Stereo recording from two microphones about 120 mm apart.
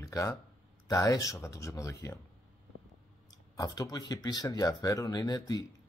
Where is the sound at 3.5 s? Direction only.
30° left (ahead or behind).